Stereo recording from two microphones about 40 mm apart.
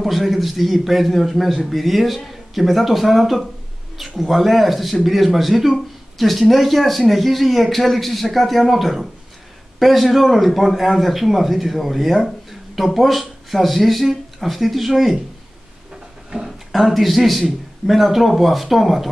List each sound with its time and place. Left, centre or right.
0.0 s a man's voice: centre
15.9 s a sound: centre
16.4 s a man's voice: centre